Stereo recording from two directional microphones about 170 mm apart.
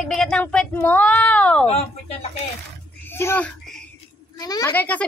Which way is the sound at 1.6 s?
40° left (ahead or behind).